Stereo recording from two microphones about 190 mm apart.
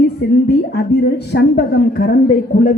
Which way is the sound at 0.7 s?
60° left (ahead or behind).